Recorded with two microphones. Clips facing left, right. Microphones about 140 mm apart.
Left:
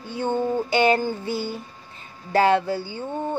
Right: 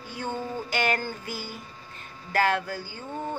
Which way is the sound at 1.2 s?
30° left (ahead or behind).